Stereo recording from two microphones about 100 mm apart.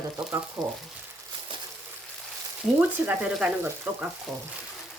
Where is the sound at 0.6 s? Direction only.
5° right (ahead or behind).